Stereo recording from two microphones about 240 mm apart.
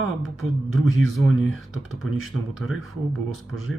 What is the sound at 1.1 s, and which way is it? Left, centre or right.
Speech, centre.